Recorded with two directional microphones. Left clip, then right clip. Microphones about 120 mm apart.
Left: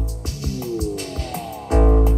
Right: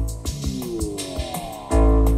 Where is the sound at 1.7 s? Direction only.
20° right (ahead or behind).